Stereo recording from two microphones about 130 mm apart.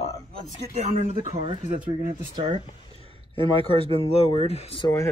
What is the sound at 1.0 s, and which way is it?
Speech, 55° right (ahead or behind).